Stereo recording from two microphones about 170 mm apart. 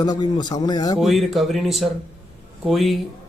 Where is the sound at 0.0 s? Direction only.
25° left (ahead or behind).